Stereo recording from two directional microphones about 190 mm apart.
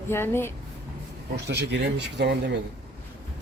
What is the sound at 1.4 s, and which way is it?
Speech, 65° right (ahead or behind).